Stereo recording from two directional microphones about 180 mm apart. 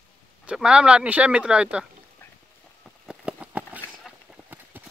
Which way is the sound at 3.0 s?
5° right (ahead or behind).